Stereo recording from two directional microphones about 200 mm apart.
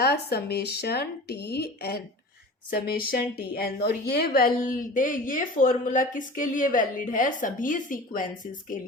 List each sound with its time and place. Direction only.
0.0 s a woman's voice: 55° left (ahead or behind)